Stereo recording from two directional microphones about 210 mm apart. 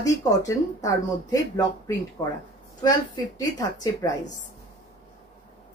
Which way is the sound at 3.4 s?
15° left (ahead or behind).